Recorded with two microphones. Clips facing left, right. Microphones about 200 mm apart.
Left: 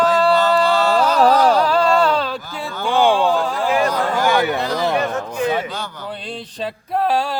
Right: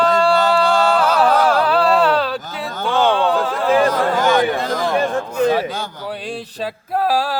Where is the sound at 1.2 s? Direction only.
35° left (ahead or behind).